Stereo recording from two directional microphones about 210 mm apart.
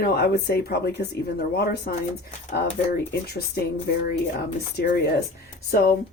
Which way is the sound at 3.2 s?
50° left (ahead or behind).